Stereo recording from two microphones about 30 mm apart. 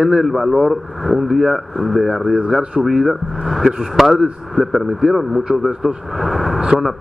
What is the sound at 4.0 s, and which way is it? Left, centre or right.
Speech, centre.